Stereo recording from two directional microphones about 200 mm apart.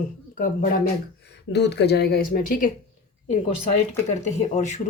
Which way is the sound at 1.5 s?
60° left (ahead or behind).